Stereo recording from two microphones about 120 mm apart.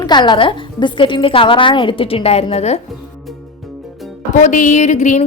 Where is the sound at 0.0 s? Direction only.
40° left (ahead or behind); by 2.8 s 60° left (ahead or behind).